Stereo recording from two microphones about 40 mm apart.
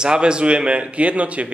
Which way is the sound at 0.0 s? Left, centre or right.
Right.